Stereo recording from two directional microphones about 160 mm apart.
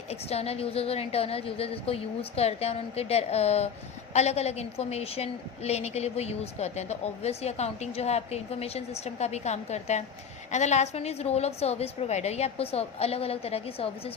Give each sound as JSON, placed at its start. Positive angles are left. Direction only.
{"t": 0.1, "sound": "a woman's voice", "side_deg": 40}